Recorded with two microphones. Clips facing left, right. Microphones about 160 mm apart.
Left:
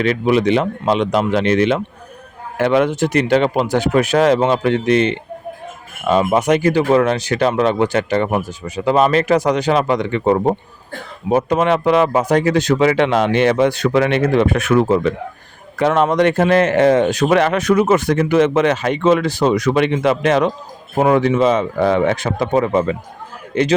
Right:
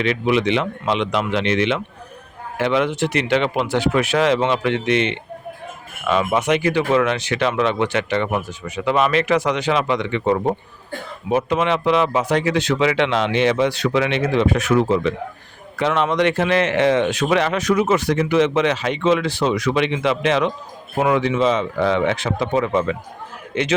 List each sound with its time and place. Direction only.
0.0 s a man's voice: 45° left (ahead or behind)